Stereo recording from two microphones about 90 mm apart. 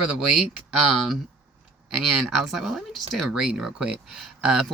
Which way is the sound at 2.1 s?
Centre (ahead or behind).